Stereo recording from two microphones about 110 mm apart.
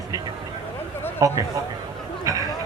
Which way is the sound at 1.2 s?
30° right (ahead or behind).